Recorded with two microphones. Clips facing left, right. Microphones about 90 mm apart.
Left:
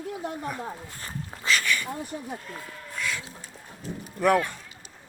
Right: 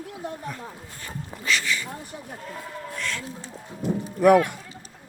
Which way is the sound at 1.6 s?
55° left (ahead or behind).